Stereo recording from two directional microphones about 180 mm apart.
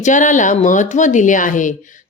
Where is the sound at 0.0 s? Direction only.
45° left (ahead or behind).